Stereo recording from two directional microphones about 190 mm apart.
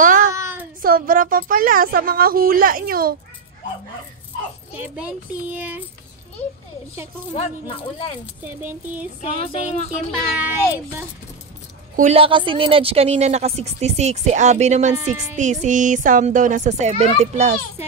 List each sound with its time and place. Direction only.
0.0 s child singing: 45° right (ahead or behind)
0.3 s child singing: 15° right (ahead or behind)
0.8 s a woman's voice: 45° right (ahead or behind)
4.7 s a child's voice: 5° right (ahead or behind)
8.4 s a child's voice: 10° right (ahead or behind)
9.2 s speech: 30° left (ahead or behind)
10.3 s a child's voice: 10° right (ahead or behind)
12.0 s a woman's voice: 30° right (ahead or behind)